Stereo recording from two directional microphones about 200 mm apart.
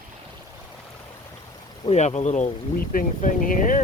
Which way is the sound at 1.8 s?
30° left (ahead or behind).